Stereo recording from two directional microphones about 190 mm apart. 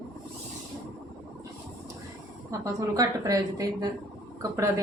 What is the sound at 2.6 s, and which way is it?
A woman's voice, 15° right (ahead or behind).